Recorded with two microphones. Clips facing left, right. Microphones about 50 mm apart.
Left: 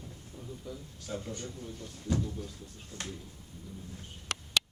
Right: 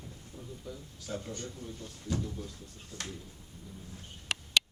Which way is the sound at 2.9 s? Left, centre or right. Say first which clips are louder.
Even; left.